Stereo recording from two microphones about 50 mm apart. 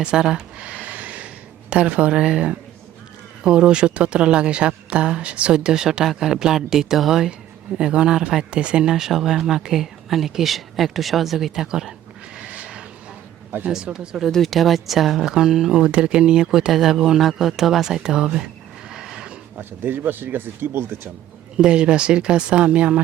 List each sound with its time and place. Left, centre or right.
0.0 s speech: centre
0.6 s a sound: right
1.7 s speech: right; by 7.3 s centre
7.8 s speech: centre
8.9 s speech: centre
12.4 s a sound: right
13.7 s speech: centre
14.2 s speech: centre
18.9 s neigh: centre
19.5 s speech: right
21.5 s speech: centre